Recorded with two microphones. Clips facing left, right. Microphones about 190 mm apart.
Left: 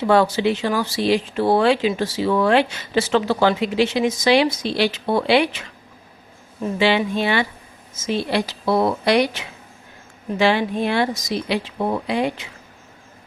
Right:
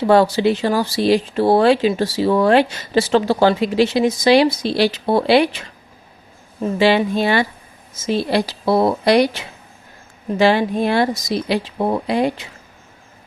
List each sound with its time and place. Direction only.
0.1 s speech: 35° right (ahead or behind)